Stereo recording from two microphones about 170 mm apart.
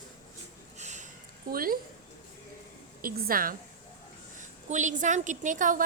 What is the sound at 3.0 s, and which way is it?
Speech, 60° right (ahead or behind).